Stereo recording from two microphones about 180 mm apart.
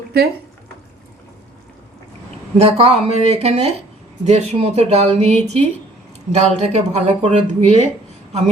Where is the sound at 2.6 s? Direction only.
35° right (ahead or behind).